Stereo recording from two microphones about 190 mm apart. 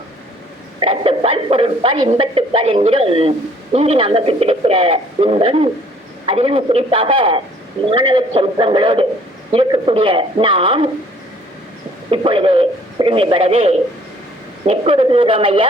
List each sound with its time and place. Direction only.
0.8 s a man's voice: 30° right (ahead or behind)
12.1 s a man's voice: 30° right (ahead or behind)